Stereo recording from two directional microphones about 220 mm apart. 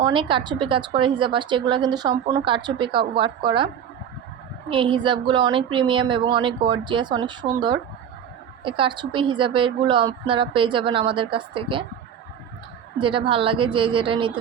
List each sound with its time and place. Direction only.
0.0 s a woman's voice: 20° right (ahead or behind)
4.7 s a woman's voice: 20° right (ahead or behind)
13.0 s a woman's voice: 25° right (ahead or behind)